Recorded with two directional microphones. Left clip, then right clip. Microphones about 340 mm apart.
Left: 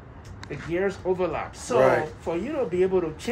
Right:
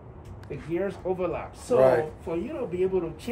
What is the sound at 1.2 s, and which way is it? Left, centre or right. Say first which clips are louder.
Speech: left 3 dB; centre.